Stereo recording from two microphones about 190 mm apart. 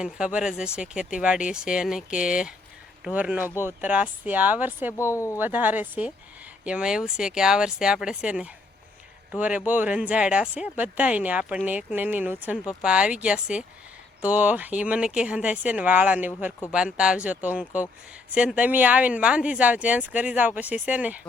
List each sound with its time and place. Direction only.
0.0 s speech: 5° right (ahead or behind)
4.9 s speech: 15° left (ahead or behind)
5.4 s speech: 10° right (ahead or behind)